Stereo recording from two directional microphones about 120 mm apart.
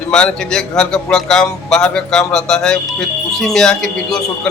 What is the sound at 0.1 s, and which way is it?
A man's voice, 5° left (ahead or behind).